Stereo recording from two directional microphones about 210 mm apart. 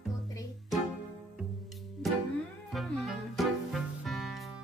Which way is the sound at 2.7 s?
Centre (ahead or behind).